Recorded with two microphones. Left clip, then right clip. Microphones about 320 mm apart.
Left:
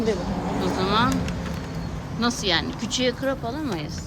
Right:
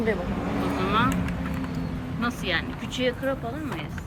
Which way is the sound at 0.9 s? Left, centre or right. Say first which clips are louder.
Left 2 dB; centre.